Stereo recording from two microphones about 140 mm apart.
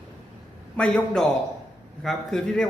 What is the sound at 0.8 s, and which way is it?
A man's voice, 5° left (ahead or behind).